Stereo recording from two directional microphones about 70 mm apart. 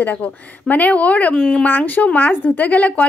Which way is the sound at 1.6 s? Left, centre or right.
Left.